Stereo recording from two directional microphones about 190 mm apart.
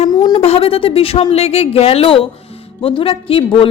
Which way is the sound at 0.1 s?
20° left (ahead or behind).